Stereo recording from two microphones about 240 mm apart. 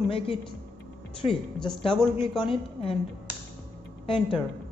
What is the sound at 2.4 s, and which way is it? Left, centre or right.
Speech, left.